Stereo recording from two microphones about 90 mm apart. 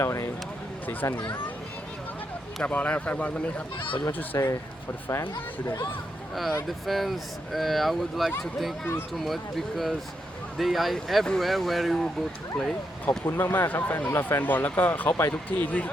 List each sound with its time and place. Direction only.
0.0 s speech: 35° left (ahead or behind)
2.6 s speech: 15° left (ahead or behind)
4.3 s speech: 35° left (ahead or behind)
5.0 s speech: 25° left (ahead or behind)
6.7 s speech: centre (ahead or behind)
13.1 s speech: 25° left (ahead or behind)